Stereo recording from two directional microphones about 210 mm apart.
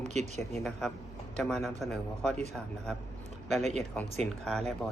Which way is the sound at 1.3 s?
Centre (ahead or behind).